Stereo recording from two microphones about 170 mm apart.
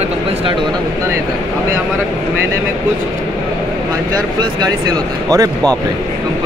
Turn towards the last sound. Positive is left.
turn(degrees=-20)  # may be behind; listen again after turning